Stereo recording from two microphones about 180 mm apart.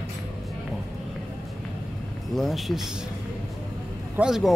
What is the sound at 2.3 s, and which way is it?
Speech, centre (ahead or behind).